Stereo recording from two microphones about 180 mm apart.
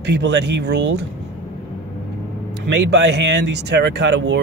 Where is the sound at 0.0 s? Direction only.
70° right (ahead or behind).